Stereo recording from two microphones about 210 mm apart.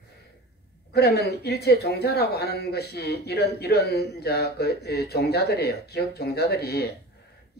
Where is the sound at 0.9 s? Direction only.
50° left (ahead or behind).